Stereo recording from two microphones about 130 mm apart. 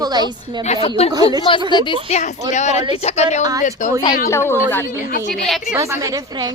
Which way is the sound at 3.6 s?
75° left (ahead or behind).